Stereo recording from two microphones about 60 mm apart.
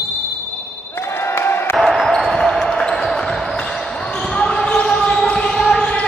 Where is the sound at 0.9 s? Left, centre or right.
Left.